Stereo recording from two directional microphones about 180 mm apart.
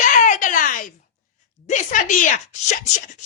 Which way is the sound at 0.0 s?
45° left (ahead or behind).